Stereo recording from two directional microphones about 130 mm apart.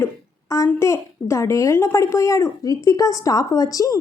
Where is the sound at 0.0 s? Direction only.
25° left (ahead or behind).